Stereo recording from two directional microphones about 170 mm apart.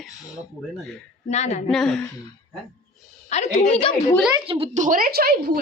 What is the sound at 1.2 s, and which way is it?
Speech, 40° left (ahead or behind).